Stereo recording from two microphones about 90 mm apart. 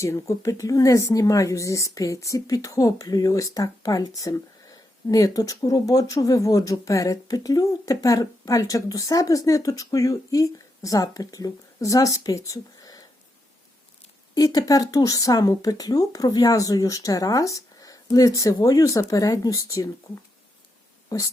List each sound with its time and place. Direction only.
0.0 s speech: 35° left (ahead or behind)
14.3 s speech: 40° left (ahead or behind)
21.1 s speech: 40° left (ahead or behind)